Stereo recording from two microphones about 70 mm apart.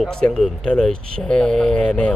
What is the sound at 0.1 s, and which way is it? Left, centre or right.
Speech, centre.